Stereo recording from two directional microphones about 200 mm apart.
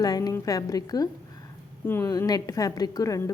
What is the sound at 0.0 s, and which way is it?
A woman's voice, 20° left (ahead or behind).